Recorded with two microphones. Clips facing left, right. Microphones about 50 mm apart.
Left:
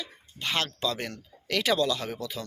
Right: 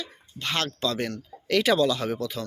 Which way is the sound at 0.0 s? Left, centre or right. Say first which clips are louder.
Right 1 dB; centre.